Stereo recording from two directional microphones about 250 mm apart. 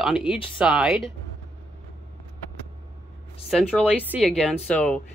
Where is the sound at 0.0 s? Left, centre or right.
Centre.